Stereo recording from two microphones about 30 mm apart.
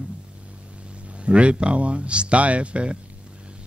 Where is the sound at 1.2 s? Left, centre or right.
Right.